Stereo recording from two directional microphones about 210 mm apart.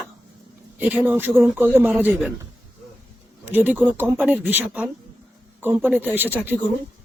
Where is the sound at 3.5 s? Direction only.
10° right (ahead or behind).